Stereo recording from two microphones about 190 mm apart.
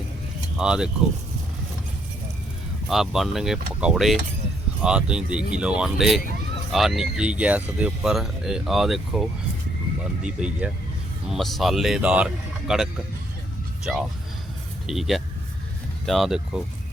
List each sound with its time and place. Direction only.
0.5 s speech: 5° right (ahead or behind)
2.9 s speech: centre (ahead or behind)
10.2 s speech: 5° right (ahead or behind)